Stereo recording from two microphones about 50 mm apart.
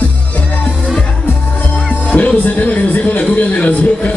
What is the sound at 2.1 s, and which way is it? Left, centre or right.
Music, left.